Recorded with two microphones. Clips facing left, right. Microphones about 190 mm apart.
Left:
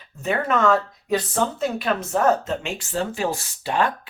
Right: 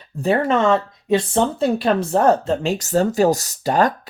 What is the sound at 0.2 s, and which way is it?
Speech, 30° right (ahead or behind).